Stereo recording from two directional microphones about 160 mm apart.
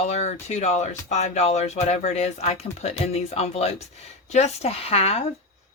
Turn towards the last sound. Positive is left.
turn(degrees=40)  # may be behind; listen again after turning